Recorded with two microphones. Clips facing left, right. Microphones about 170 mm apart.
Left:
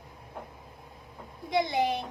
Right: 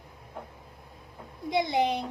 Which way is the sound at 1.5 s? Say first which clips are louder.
Right 1 dB; 20° right (ahead or behind).